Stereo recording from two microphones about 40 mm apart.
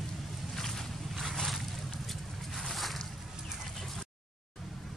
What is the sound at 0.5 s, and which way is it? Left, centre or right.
Boat, centre.